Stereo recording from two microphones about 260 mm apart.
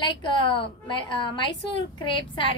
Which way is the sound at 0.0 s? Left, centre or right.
Centre.